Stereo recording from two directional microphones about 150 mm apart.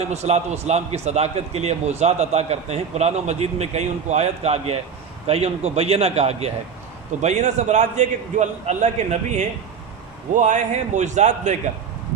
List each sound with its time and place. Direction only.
0.1 s a man's voice: 45° right (ahead or behind)